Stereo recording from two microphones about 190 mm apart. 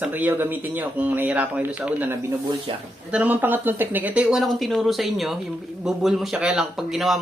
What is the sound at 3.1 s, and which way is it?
Speech, 10° right (ahead or behind).